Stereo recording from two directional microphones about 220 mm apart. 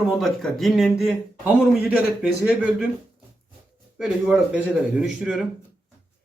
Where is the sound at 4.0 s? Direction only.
5° right (ahead or behind).